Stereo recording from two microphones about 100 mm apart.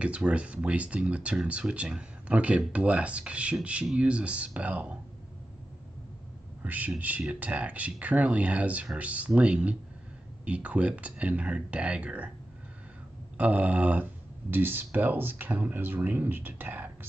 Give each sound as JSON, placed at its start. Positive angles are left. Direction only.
{"t": 0.0, "sound": "speech", "side_deg": -10}
{"t": 6.6, "sound": "speech", "side_deg": -15}
{"t": 13.4, "sound": "speech", "side_deg": -15}